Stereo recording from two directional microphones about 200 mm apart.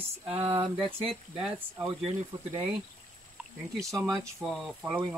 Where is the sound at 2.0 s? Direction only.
30° right (ahead or behind).